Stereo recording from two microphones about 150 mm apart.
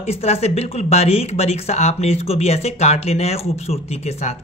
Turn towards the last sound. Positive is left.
turn(degrees=45)  # may be behind; listen again after turning